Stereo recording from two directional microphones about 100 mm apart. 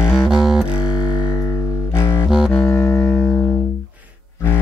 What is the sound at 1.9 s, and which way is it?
Music, 25° left (ahead or behind).